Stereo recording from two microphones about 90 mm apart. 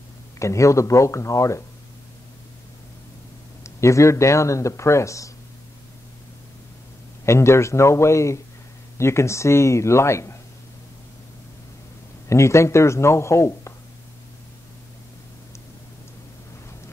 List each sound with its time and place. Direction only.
0.4 s speech: 35° left (ahead or behind)
3.6 s speech: 35° left (ahead or behind)
7.2 s speech: 30° left (ahead or behind)
12.3 s speech: 35° left (ahead or behind)